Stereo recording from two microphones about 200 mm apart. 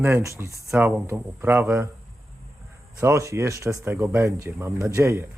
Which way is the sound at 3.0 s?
15° right (ahead or behind).